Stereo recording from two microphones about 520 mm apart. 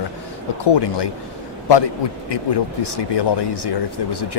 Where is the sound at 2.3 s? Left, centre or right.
Left.